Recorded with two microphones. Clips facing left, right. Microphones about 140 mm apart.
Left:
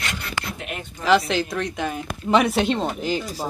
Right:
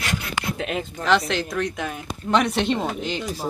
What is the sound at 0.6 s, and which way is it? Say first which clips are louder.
Speech: right 6 dB; 90° right.